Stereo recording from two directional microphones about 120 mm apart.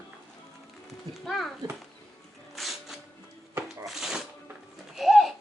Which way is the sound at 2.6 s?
Centre (ahead or behind).